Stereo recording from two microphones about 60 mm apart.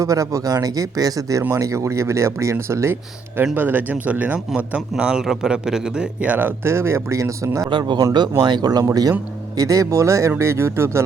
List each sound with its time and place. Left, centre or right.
0.0 s speech: right
1.4 s speech: right
3.5 s a man's voice: right; by 6.1 s centre
6.1 s speech: right
6.7 s speech: right